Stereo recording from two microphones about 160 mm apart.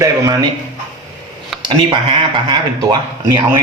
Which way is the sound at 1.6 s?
30° right (ahead or behind).